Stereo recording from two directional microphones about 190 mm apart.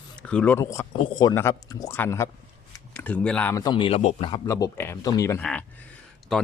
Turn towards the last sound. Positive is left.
turn(degrees=0)  # may be behind; listen again after turning